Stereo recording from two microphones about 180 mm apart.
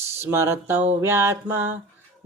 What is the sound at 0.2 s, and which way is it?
Speech, 15° right (ahead or behind).